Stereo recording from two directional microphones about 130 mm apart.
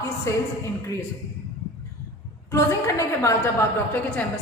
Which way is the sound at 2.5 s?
25° left (ahead or behind).